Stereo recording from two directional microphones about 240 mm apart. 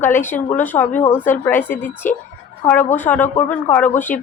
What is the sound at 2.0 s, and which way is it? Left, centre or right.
Speech, left.